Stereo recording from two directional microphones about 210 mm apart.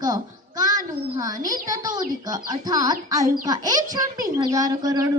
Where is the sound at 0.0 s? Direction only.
20° right (ahead or behind).